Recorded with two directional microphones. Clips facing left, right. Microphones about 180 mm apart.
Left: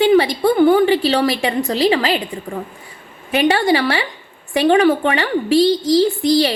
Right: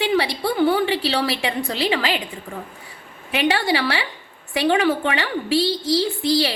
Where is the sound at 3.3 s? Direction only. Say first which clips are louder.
Left 5 dB; 45° left (ahead or behind).